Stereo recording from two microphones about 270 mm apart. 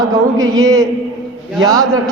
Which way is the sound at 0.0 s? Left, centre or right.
Centre.